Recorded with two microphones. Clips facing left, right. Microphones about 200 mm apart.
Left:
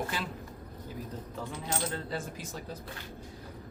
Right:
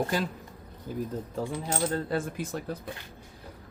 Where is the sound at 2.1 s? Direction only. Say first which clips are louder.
Right 7 dB; 55° right (ahead or behind).